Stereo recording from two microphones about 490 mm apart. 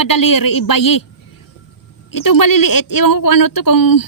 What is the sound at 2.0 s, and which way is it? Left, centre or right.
A woman's voice, left.